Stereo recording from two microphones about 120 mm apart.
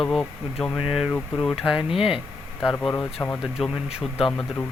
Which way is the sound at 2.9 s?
20° left (ahead or behind).